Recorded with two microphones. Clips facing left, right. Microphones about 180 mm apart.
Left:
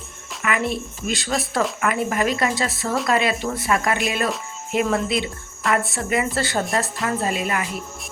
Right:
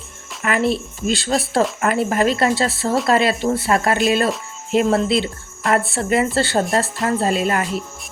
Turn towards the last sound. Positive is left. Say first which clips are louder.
# right 5 dB
turn(degrees=-30)  # may be behind; listen again after turning